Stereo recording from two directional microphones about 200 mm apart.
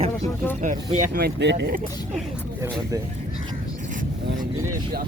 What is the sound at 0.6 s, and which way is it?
Speech, 40° right (ahead or behind).